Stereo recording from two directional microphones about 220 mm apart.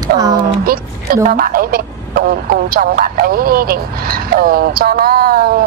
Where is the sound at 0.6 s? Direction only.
40° right (ahead or behind).